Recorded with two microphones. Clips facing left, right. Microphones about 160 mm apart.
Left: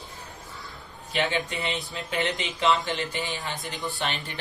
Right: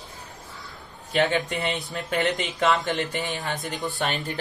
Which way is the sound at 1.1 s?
45° right (ahead or behind).